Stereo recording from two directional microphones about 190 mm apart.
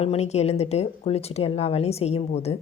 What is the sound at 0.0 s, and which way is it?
Speech, 35° left (ahead or behind).